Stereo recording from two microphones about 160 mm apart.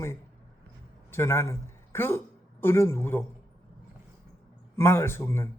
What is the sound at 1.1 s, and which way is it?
A woman's voice, 15° left (ahead or behind).